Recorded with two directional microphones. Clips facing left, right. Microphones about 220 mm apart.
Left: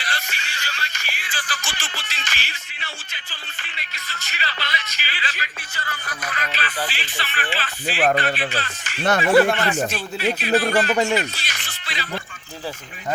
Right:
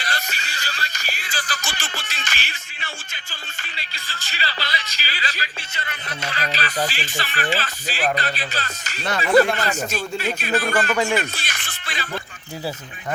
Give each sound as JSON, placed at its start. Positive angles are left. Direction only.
{"t": 0.0, "sound": "music", "side_deg": -40}
{"t": 3.6, "sound": "speech", "side_deg": -30}
{"t": 5.7, "sound": "a man's voice", "side_deg": -20}
{"t": 11.2, "sound": "music", "side_deg": -50}